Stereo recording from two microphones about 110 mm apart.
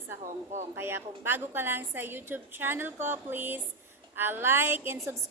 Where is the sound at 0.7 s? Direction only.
20° right (ahead or behind).